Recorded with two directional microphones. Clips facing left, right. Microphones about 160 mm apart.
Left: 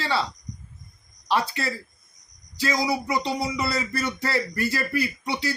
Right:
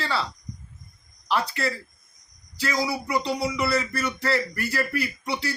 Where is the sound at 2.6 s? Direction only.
20° left (ahead or behind).